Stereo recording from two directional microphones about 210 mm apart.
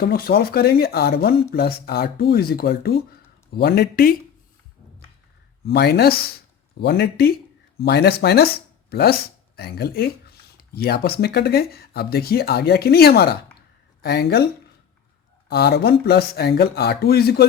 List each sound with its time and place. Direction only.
0.0 s speech: 45° left (ahead or behind)
5.6 s speech: 50° left (ahead or behind)
15.4 s speech: 50° left (ahead or behind)